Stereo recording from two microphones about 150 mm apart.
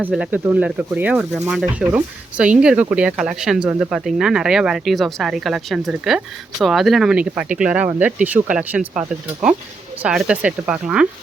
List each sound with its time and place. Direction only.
0.0 s speech: 10° right (ahead or behind)